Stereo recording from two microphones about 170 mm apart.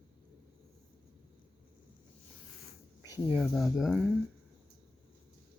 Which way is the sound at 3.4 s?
Centre (ahead or behind).